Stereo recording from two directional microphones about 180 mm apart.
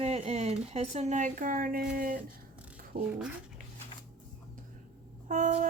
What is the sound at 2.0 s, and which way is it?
Music, 50° right (ahead or behind).